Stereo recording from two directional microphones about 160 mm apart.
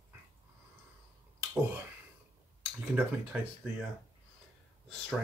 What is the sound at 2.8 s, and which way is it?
Speech, 10° right (ahead or behind).